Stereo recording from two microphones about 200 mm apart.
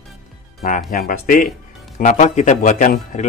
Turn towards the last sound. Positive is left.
turn(degrees=40)  # may be behind; listen again after turning